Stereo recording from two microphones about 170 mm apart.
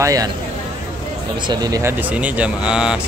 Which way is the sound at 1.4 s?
20° right (ahead or behind).